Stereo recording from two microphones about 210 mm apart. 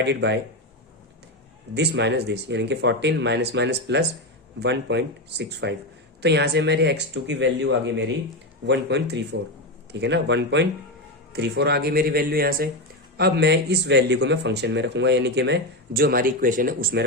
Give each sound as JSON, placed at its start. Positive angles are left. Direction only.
{"t": 0.0, "sound": "speech", "side_deg": -55}
{"t": 1.7, "sound": "speech", "side_deg": -55}